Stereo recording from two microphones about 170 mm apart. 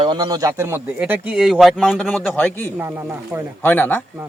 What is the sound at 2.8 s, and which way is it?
Speech, 15° right (ahead or behind).